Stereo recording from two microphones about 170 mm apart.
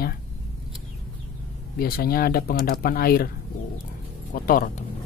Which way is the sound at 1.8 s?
60° left (ahead or behind).